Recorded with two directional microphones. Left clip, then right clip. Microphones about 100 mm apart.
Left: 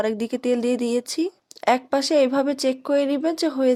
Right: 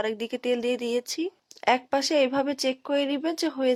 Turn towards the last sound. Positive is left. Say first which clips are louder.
# left 5 dB
turn(degrees=35)  # may be behind; listen again after turning